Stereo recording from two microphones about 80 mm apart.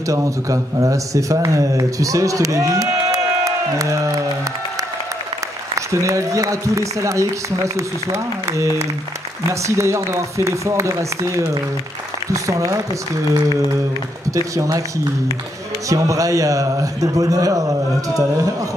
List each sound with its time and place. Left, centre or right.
0.1 s speech: right
5.8 s a man's voice: right
15.9 s a man's voice: right